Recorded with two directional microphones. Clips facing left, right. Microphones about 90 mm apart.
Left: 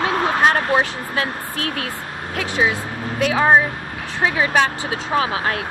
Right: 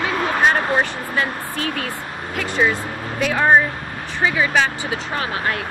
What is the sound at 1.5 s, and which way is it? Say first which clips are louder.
Speech: right 1 dB; 80° left.